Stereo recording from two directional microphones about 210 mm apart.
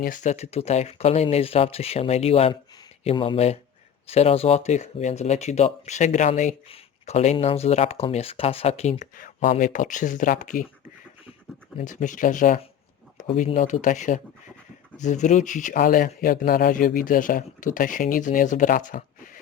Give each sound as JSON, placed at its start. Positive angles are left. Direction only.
{"t": 0.0, "sound": "speech", "side_deg": 40}
{"t": 11.8, "sound": "speech", "side_deg": 35}